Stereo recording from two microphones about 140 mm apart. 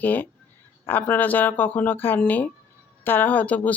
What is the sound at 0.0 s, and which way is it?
Speech, 15° left (ahead or behind).